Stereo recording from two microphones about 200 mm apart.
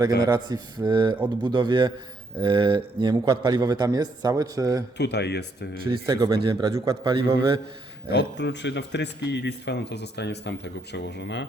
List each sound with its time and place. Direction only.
0.2 s a man's voice: 20° right (ahead or behind)
4.9 s speech: 55° left (ahead or behind)
5.8 s a man's voice: 25° right (ahead or behind)
7.2 s a man's voice: 25° right (ahead or behind)
8.1 s speech: 60° left (ahead or behind)